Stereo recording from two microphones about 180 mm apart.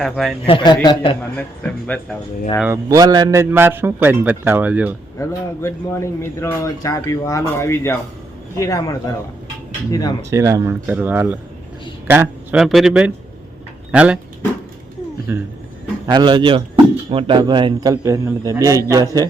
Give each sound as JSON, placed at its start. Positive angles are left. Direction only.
{"t": 0.0, "sound": "speech", "side_deg": 0}
{"t": 0.4, "sound": "a man's voice", "side_deg": 25}
{"t": 1.4, "sound": "speech", "side_deg": 5}
{"t": 2.6, "sound": "a man's voice", "side_deg": -20}
{"t": 5.2, "sound": "a man's voice", "side_deg": 15}
{"t": 10.2, "sound": "a man's voice", "side_deg": -15}
{"t": 15.3, "sound": "a man's voice", "side_deg": -15}
{"t": 16.0, "sound": "a man's voice", "side_deg": -25}